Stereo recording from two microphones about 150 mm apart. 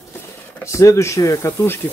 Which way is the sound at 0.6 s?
20° left (ahead or behind).